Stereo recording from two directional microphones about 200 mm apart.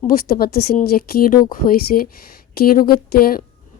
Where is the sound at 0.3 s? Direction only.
50° left (ahead or behind).